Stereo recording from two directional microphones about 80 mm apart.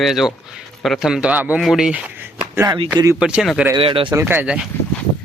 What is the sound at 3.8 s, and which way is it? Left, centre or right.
Speech, right.